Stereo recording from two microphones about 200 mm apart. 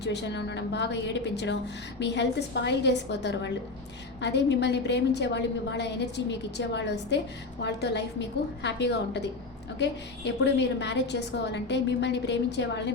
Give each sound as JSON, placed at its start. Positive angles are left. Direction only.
{"t": 0.0, "sound": "a woman's voice", "side_deg": 60}